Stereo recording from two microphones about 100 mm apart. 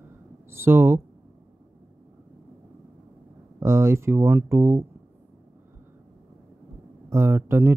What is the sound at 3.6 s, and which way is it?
Speech, 30° right (ahead or behind).